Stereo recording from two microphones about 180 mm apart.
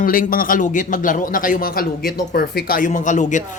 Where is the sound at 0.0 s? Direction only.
50° left (ahead or behind).